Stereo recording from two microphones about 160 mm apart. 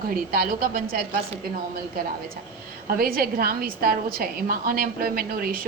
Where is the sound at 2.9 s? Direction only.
65° right (ahead or behind).